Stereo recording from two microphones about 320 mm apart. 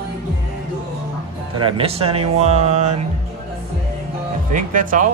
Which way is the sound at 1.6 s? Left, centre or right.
Centre.